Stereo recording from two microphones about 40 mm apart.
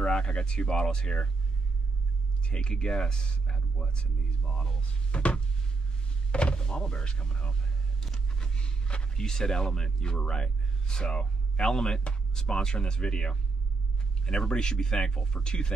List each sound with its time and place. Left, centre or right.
0.0 s speech: left
2.4 s speech: left
8.3 s a sound: centre
9.8 s speech: centre